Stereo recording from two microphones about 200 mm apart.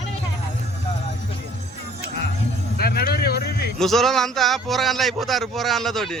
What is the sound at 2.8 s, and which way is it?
Music, 50° left (ahead or behind).